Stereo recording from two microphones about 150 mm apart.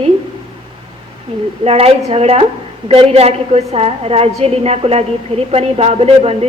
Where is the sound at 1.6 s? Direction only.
40° right (ahead or behind).